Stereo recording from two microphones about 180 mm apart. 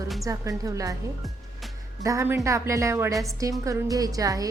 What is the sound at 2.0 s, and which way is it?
A woman's voice, 15° right (ahead or behind).